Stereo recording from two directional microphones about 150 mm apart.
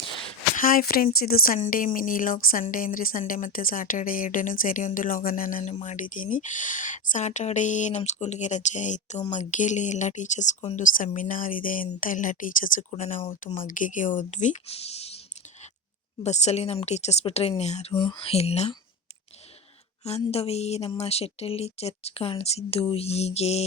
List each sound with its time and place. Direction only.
0.5 s speech: 70° left (ahead or behind); by 15.2 s 45° left (ahead or behind)
16.2 s speech: 50° left (ahead or behind)
17.9 s speech: 30° left (ahead or behind)
20.1 s speech: 45° left (ahead or behind)